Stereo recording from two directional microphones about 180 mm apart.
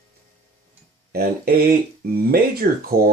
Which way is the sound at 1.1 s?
60° right (ahead or behind).